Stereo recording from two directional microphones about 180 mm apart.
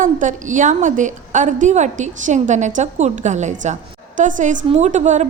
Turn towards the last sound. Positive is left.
turn(degrees=-40)  # may be behind; listen again after turning